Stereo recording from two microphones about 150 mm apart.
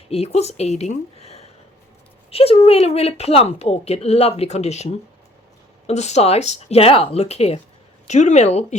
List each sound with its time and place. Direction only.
0.1 s a woman's voice: 45° left (ahead or behind)